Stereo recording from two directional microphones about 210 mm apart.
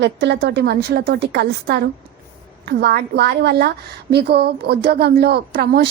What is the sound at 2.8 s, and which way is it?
A woman's voice, 50° right (ahead or behind).